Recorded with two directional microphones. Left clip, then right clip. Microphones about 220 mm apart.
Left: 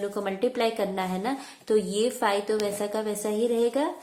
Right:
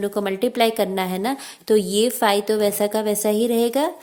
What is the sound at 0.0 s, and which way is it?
A woman's voice, 45° right (ahead or behind).